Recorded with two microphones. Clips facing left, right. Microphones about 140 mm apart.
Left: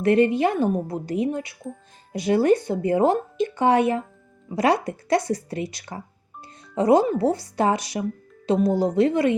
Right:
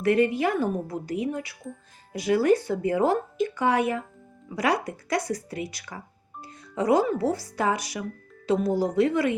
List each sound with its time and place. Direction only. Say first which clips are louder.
0.0 s speech: left 4 dB; 25° left (ahead or behind)